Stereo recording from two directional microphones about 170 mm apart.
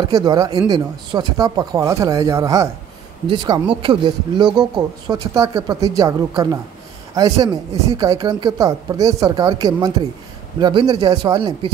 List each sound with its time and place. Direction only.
0.0 s speech: 25° right (ahead or behind)